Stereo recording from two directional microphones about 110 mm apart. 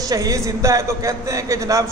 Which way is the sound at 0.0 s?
35° right (ahead or behind).